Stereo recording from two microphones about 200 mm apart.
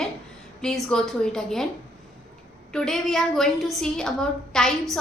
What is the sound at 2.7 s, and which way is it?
A woman's voice, centre (ahead or behind).